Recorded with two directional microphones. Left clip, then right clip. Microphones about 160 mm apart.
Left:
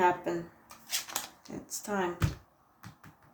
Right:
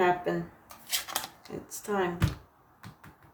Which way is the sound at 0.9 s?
15° right (ahead or behind).